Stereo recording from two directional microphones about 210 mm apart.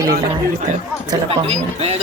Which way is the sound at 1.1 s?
25° right (ahead or behind).